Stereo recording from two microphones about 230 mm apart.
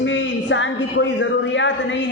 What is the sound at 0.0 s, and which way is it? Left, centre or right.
A man's voice, left.